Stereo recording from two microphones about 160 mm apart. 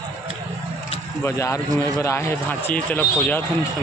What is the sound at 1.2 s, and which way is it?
Speech, 15° left (ahead or behind).